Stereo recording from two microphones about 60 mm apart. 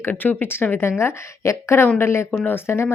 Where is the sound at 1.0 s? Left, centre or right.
Left.